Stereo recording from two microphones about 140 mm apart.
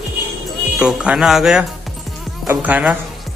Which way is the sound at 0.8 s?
5° right (ahead or behind).